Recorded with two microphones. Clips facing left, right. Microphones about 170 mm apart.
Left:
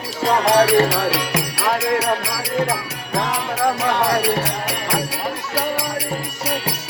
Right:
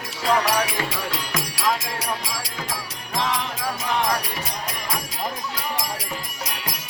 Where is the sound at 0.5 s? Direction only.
80° left.